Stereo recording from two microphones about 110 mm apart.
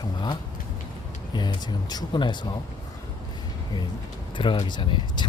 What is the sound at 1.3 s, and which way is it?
Speech, 40° left (ahead or behind).